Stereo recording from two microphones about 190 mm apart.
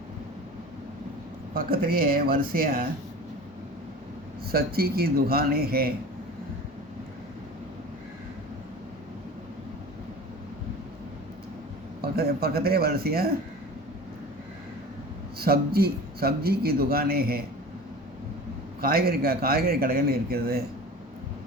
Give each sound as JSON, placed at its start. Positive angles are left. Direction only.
{"t": 1.5, "sound": "a man's voice", "side_deg": -50}
{"t": 4.5, "sound": "a man's voice", "side_deg": -55}
{"t": 12.0, "sound": "a man's voice", "side_deg": -55}
{"t": 15.4, "sound": "a man's voice", "side_deg": -55}
{"t": 18.8, "sound": "a man's voice", "side_deg": -50}